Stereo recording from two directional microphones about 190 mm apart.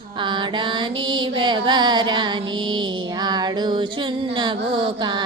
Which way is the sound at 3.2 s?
20° right (ahead or behind).